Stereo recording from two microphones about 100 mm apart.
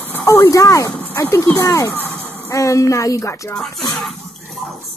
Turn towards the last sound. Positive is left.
turn(degrees=0)  # may be behind; listen again after turning